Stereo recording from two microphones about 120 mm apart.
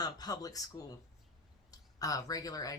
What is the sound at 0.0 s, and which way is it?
A woman's voice, 30° left (ahead or behind).